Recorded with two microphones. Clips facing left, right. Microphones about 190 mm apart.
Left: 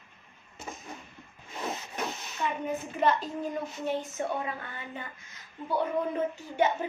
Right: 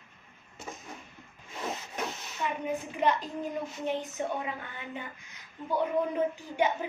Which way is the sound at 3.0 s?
15° right (ahead or behind).